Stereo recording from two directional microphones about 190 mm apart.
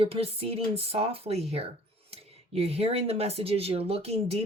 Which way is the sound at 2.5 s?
30° right (ahead or behind).